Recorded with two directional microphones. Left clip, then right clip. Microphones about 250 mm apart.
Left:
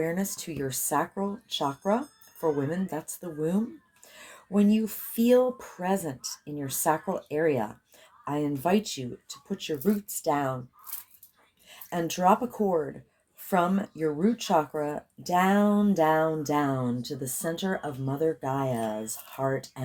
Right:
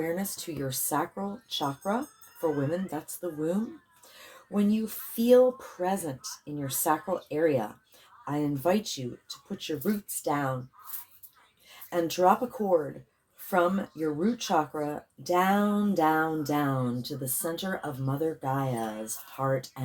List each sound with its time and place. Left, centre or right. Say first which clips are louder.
0.0 s speech: left 2 dB; left
10.2 s speech: left 2 dB; left
11.7 s speech: right 2 dB; left